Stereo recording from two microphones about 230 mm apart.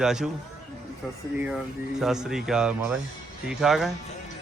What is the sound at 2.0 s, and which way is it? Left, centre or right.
A man's voice, centre.